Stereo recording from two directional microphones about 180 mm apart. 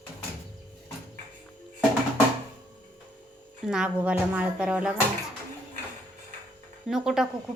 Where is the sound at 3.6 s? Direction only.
5° right (ahead or behind).